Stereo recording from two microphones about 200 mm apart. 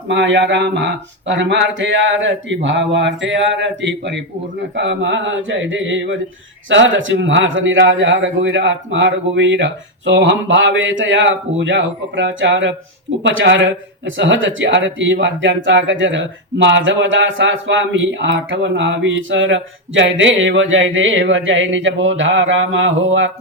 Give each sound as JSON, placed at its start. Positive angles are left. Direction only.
{"t": 0.1, "sound": "speech", "side_deg": -65}